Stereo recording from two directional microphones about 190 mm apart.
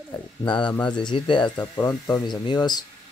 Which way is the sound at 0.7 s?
5° left (ahead or behind).